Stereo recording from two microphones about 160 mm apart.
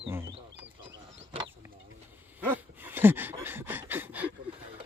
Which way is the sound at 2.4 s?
10° right (ahead or behind).